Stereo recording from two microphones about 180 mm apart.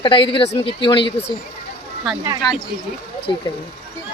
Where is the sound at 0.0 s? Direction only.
30° left (ahead or behind).